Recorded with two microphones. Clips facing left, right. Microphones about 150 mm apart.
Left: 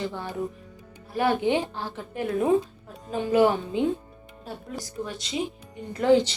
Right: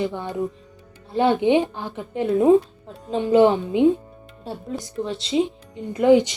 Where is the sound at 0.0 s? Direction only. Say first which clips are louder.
Right 5 dB; 20° right (ahead or behind).